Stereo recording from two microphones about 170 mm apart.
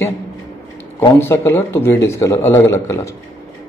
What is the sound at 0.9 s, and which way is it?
Speech, 15° left (ahead or behind).